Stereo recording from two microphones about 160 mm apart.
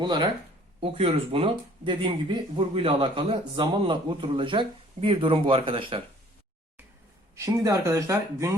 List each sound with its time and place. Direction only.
0.0 s speech: 25° right (ahead or behind)
7.3 s speech: 20° right (ahead or behind)